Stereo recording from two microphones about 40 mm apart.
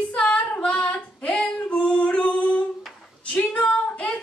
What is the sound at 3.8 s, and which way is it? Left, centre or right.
Singing, left.